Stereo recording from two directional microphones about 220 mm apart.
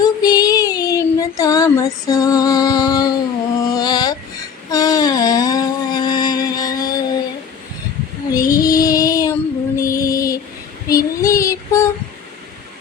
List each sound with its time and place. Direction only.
0.0 s child singing: 15° left (ahead or behind)
3.7 s a sound: 20° left (ahead or behind)
8.3 s child singing: 15° left (ahead or behind)